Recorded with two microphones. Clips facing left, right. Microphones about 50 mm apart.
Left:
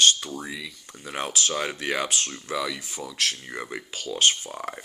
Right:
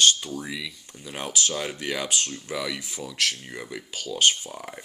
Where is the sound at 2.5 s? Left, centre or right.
Left.